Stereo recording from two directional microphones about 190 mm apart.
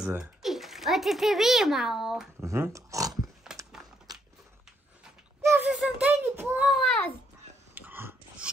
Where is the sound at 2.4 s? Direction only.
15° right (ahead or behind).